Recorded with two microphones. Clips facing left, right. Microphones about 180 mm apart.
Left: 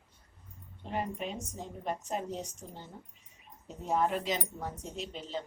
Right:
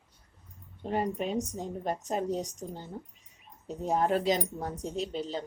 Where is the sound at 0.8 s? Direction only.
40° right (ahead or behind).